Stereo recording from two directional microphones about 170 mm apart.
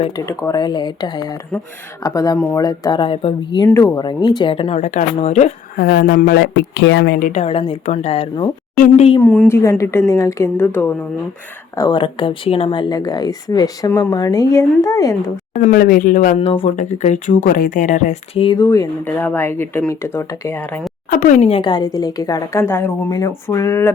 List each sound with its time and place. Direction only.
0.3 s speech: 20° left (ahead or behind)
3.7 s speech: 15° left (ahead or behind); by 5.5 s 45° left (ahead or behind)
5.7 s speech: 75° left (ahead or behind); by 7.4 s 55° left (ahead or behind)
7.4 s speech: 35° left (ahead or behind)
9.2 s speech: 10° left (ahead or behind)
11.8 s speech: 25° left (ahead or behind)
15.7 s speech: 55° left (ahead or behind)
16.4 s speech: 40° left (ahead or behind)
18.6 s speech: 20° left (ahead or behind)
21.1 s speech: 45° left (ahead or behind); by 23.9 s 15° left (ahead or behind)